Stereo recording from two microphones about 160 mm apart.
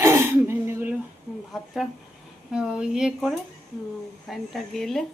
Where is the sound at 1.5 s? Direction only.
Centre (ahead or behind).